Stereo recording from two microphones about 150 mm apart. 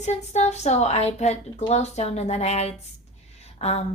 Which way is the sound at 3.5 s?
45° left (ahead or behind).